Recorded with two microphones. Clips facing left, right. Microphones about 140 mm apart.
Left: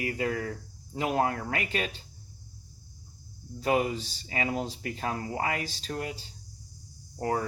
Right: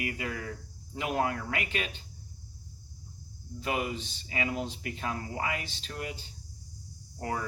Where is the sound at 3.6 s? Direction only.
40° left (ahead or behind).